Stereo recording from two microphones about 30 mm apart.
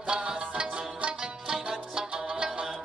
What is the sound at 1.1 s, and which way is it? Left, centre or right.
Music, right.